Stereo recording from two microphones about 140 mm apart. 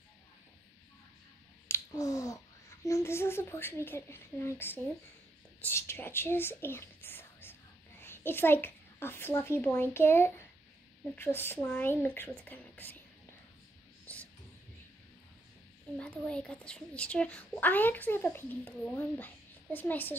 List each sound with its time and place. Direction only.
1.7 s a child's voice: 25° left (ahead or behind)
14.0 s whispering: 10° left (ahead or behind)
16.0 s a woman's voice: 10° left (ahead or behind)